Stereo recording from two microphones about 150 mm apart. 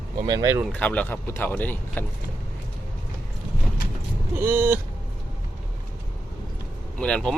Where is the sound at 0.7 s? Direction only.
10° left (ahead or behind).